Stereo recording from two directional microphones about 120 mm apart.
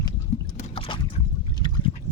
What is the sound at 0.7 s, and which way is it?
Boat, 45° left (ahead or behind).